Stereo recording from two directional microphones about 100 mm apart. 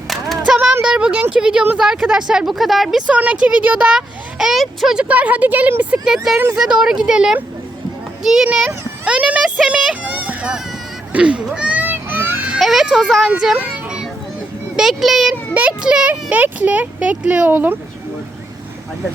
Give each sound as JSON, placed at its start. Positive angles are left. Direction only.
{"t": 0.1, "sound": "a sound", "side_deg": -5}
{"t": 0.8, "sound": "speech", "side_deg": -10}
{"t": 3.1, "sound": "speech", "side_deg": -15}
{"t": 9.6, "sound": "music", "side_deg": -10}
{"t": 11.1, "sound": "children playing", "side_deg": -10}
{"t": 12.5, "sound": "speech", "side_deg": 0}
{"t": 13.7, "sound": "children playing", "side_deg": -10}
{"t": 14.8, "sound": "speech", "side_deg": 0}
{"t": 15.5, "sound": "speech", "side_deg": -10}